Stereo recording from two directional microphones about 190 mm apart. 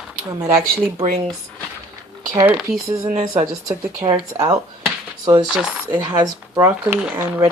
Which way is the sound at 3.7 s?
20° right (ahead or behind).